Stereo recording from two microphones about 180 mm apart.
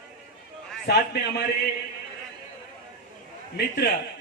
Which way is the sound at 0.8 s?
65° left (ahead or behind).